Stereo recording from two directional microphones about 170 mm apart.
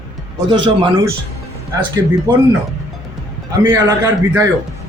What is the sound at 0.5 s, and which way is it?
Speech, 25° right (ahead or behind).